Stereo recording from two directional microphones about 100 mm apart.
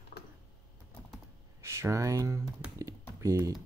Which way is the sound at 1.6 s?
30° right (ahead or behind).